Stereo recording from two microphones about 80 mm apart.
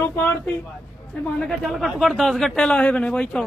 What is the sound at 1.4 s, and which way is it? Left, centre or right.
Speech, centre.